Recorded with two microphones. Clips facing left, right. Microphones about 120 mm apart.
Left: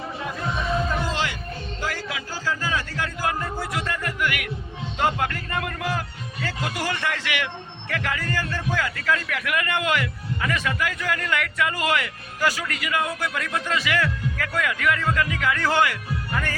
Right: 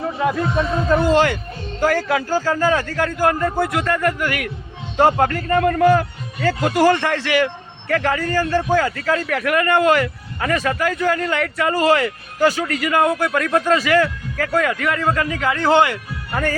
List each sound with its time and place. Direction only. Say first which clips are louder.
0.2 s a man's voice: right 10 dB; 65° right (ahead or behind)
4.3 s speech: right 5 dB; 40° right (ahead or behind)
5.8 s speech: right 13 dB; 50° right (ahead or behind); by 12.7 s 30° right (ahead or behind)
12.7 s speech: right 9 dB; 45° right (ahead or behind); by 16.0 s 25° right (ahead or behind)
16.3 s speech: right 8 dB; 40° right (ahead or behind)